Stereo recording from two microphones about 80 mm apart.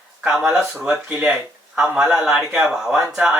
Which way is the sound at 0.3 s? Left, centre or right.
Centre.